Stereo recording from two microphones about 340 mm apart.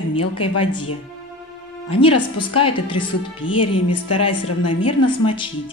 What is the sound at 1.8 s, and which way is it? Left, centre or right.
Speech, centre.